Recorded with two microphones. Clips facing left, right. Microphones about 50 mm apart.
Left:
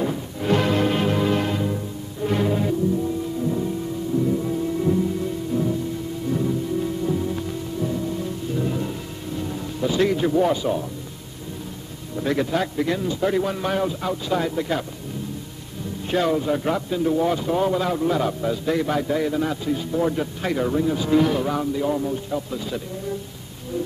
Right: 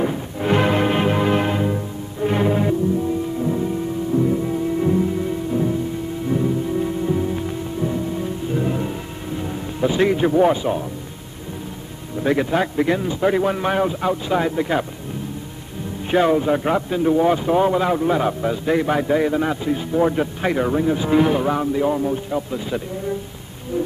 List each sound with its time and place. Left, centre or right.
0.0 s music: right
12.2 s speech: right
16.1 s speech: right